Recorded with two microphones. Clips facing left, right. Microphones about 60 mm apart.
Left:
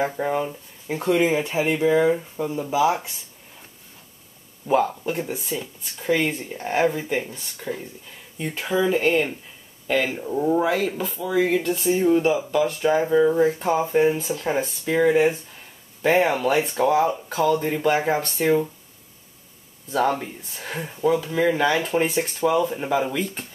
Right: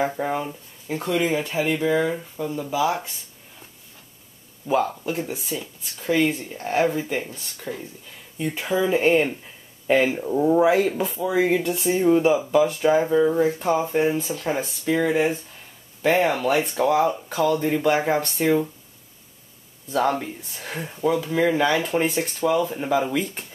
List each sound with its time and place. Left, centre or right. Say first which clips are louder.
0.0 s speech: left 1 dB; centre
0.8 s speech: left 3 dB; centre
4.6 s speech: left 1 dB; centre
8.5 s speech: even; centre; by 10.1 s right
10.1 s speech: right 2 dB; centre
19.9 s speech: even; centre